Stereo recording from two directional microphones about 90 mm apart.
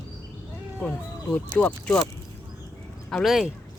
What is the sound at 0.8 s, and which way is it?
Music, 10° left (ahead or behind).